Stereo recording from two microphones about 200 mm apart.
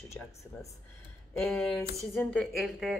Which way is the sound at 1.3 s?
5° left (ahead or behind).